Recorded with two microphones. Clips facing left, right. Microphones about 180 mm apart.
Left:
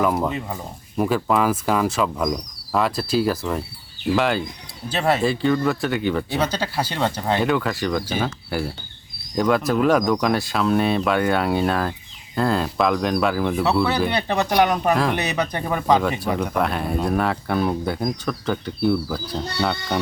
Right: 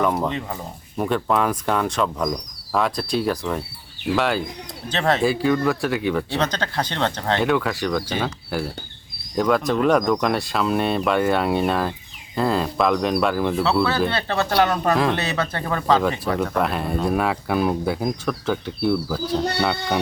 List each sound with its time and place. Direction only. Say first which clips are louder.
0.0 s speech: left 1 dB; 5° left (ahead or behind)
5.3 s speech: even; 5° right (ahead or behind)
14.1 s speech: left 1 dB; 15° left (ahead or behind)
16.4 s speech: even; centre (ahead or behind)